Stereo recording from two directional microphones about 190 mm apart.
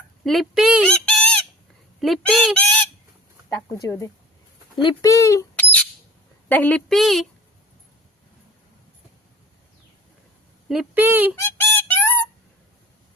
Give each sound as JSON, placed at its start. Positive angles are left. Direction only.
{"t": 0.3, "sound": "fowl", "side_deg": 0}
{"t": 0.9, "sound": "fowl", "side_deg": 5}
{"t": 3.7, "sound": "speech", "side_deg": 15}
{"t": 6.5, "sound": "fowl", "side_deg": 10}
{"t": 10.7, "sound": "speech", "side_deg": -5}
{"t": 11.3, "sound": "music", "side_deg": 10}